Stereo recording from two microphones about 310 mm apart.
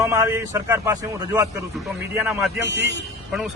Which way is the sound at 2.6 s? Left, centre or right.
Left.